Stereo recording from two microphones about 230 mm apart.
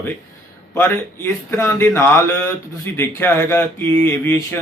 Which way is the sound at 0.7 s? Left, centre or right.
Centre.